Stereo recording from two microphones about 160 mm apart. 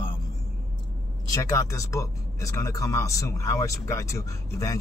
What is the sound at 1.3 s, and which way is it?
Speech, 20° left (ahead or behind).